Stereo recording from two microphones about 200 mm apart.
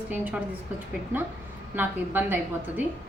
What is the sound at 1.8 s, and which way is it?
Speech, 10° right (ahead or behind).